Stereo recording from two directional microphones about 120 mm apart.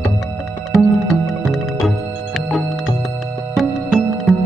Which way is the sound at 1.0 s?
Centre (ahead or behind).